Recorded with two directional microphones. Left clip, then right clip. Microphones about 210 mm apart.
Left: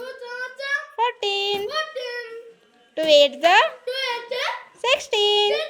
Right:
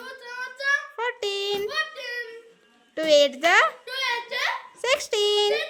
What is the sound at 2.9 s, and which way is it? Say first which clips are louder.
Speech: left 3 dB; 10° right (ahead or behind).